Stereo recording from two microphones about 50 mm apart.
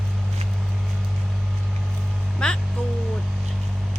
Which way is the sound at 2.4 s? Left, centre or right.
Centre.